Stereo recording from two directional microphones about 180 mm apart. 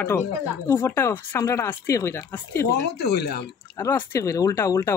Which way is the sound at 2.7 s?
65° left (ahead or behind).